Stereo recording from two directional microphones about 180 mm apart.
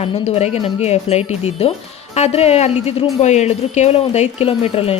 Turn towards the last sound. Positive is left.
turn(degrees=35)  # may be behind; listen again after turning